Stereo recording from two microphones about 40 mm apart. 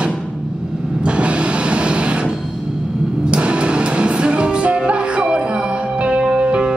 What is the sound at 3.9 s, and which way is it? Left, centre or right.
Music, right.